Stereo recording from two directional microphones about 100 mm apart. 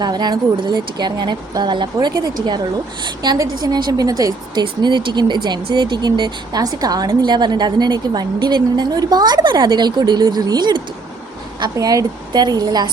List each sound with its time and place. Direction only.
0.0 s a woman's voice: 45° right (ahead or behind)
4.6 s speech: 50° right (ahead or behind)